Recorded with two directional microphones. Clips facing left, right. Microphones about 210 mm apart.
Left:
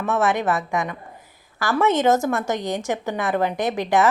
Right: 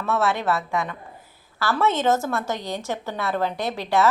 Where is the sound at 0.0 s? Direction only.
15° left (ahead or behind).